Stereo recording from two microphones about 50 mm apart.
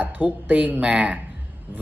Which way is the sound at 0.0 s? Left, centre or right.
Right.